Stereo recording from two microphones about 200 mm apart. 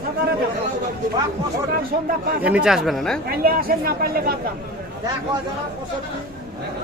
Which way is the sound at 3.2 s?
50° right (ahead or behind).